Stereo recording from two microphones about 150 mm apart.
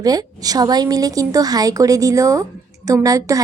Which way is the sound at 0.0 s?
25° right (ahead or behind).